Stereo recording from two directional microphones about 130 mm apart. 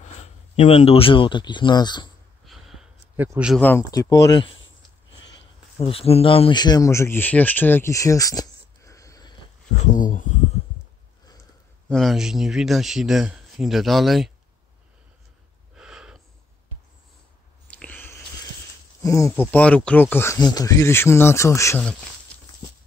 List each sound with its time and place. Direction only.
0.6 s speech: 50° left (ahead or behind); by 2.0 s 35° left (ahead or behind)
2.4 s a sound: centre (ahead or behind)
3.2 s a man's voice: 10° right (ahead or behind)
3.9 s speech: 30° left (ahead or behind)
5.8 s speech: 45° left (ahead or behind)
6.5 s speech: 30° left (ahead or behind)
9.9 s speech: 85° left
11.9 s speech: centre (ahead or behind)
15.7 s snort: 5° right (ahead or behind)
17.6 s a sound: 10° left (ahead or behind)
19.0 s speech: 25° left (ahead or behind)
20.3 s speech: 30° left (ahead or behind)